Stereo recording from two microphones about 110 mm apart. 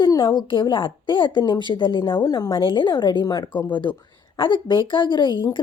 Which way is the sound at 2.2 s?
35° left (ahead or behind).